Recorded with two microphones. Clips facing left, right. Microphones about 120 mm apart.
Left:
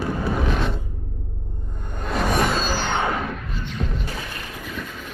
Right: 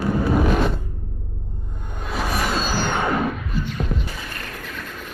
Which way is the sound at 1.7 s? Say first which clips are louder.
Left 3 dB; centre (ahead or behind).